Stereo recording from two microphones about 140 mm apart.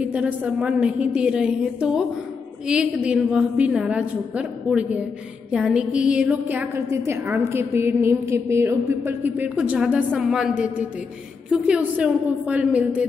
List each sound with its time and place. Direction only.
0.0 s a woman's voice: 10° right (ahead or behind)